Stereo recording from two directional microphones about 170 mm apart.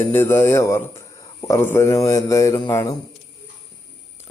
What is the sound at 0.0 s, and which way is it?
Speech, 15° left (ahead or behind).